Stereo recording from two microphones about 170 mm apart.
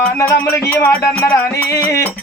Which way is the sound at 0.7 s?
15° left (ahead or behind).